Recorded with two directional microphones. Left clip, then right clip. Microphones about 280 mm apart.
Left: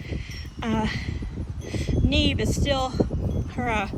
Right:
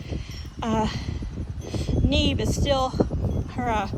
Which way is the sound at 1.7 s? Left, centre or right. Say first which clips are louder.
Even; centre.